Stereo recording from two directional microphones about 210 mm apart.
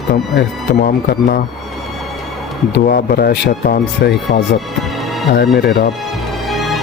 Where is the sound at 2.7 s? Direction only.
50° left (ahead or behind).